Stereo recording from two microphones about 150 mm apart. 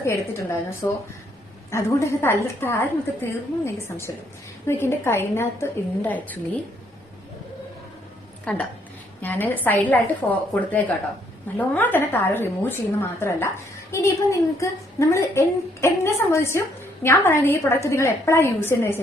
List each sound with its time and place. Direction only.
0.0 s a woman's voice: 20° left (ahead or behind)
8.5 s a woman's voice: 10° left (ahead or behind)